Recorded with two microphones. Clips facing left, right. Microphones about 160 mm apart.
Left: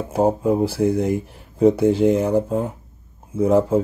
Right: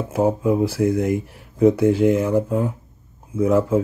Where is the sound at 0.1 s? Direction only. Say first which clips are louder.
Left 1 dB; 30° left (ahead or behind).